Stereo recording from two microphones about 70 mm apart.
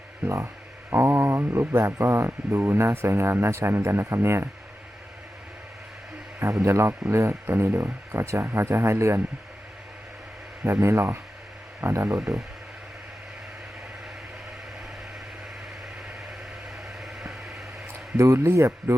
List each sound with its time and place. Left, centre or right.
0.9 s mantra: right
2.0 s speech: right
6.4 s speech: right
10.6 s speech: right
17.0 s a sound: centre
18.2 s speech: right